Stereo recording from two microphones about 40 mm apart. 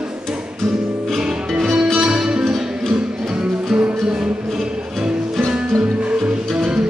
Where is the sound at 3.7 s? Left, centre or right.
Right.